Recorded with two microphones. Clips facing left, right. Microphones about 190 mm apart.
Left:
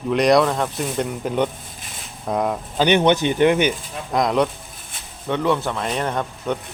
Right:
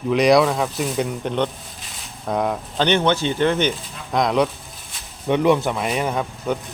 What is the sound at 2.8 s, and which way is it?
Speech, 15° left (ahead or behind).